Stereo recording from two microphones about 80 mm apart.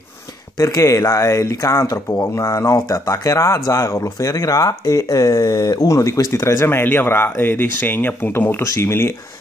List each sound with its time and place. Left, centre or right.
0.6 s speech: left
2.0 s speech: left
2.3 s speech: left